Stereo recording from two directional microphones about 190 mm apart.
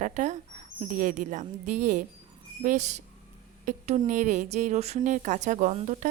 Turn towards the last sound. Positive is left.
turn(degrees=-40)  # may be behind; listen again after turning